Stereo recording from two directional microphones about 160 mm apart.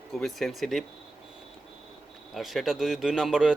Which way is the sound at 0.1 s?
Centre (ahead or behind).